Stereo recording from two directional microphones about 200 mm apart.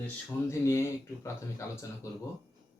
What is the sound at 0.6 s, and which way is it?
Speech, 15° left (ahead or behind).